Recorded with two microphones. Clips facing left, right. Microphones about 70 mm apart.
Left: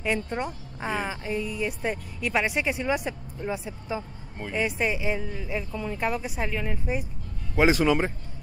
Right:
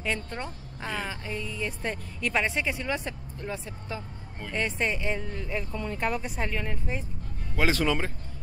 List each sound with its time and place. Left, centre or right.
0.0 s speech: centre
2.5 s speech: centre
7.5 s speech: centre